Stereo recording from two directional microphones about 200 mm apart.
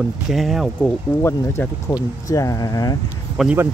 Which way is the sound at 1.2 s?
10° left (ahead or behind).